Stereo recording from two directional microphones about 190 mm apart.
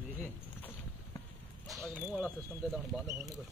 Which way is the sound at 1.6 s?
5° right (ahead or behind).